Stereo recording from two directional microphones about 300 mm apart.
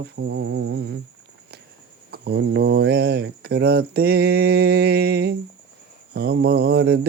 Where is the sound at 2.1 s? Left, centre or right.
Right.